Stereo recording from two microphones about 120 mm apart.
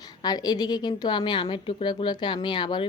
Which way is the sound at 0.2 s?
35° left (ahead or behind).